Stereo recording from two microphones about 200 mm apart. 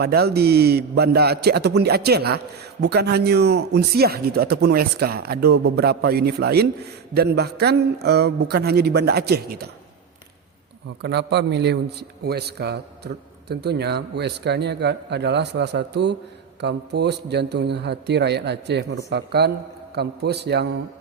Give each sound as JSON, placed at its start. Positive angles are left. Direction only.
{"t": 0.0, "sound": "speech", "side_deg": -55}
{"t": 11.0, "sound": "a man's voice", "side_deg": -55}